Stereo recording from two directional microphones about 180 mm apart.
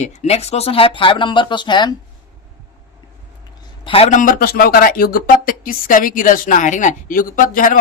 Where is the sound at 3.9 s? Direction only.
35° left (ahead or behind).